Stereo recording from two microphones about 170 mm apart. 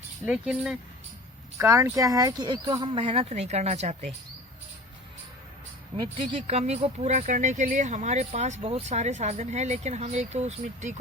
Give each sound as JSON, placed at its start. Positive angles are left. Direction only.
{"t": 0.3, "sound": "speech", "side_deg": -5}
{"t": 1.5, "sound": "speech", "side_deg": -15}
{"t": 5.9, "sound": "speech", "side_deg": -30}